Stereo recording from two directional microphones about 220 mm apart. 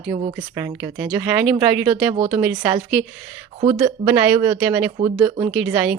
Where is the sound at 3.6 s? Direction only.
25° right (ahead or behind).